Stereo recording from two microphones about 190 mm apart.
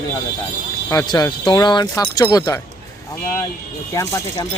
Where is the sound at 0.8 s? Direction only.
20° left (ahead or behind).